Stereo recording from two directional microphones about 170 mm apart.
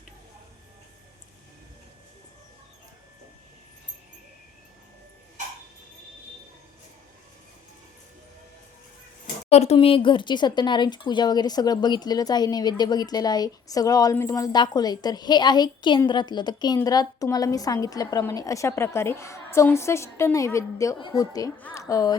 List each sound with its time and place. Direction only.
9.2 s a woman's voice: 40° left (ahead or behind); by 22.2 s 20° left (ahead or behind)